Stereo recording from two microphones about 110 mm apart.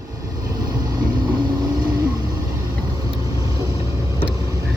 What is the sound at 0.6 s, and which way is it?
Vehicle, 40° right (ahead or behind).